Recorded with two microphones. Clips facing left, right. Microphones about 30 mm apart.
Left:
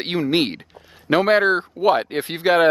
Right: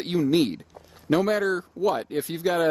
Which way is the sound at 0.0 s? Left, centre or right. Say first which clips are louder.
Left 2 dB; left.